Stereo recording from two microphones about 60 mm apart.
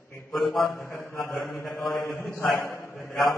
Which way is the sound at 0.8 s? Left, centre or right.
Left.